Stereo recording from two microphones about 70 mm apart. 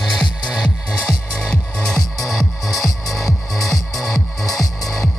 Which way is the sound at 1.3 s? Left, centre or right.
Centre.